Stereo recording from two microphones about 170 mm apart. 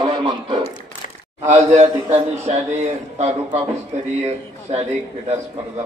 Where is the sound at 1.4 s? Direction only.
40° right (ahead or behind).